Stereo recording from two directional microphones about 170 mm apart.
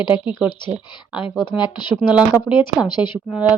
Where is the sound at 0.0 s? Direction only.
25° left (ahead or behind).